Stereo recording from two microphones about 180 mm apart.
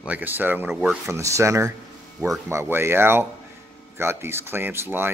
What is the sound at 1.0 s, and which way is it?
Speech, 15° right (ahead or behind).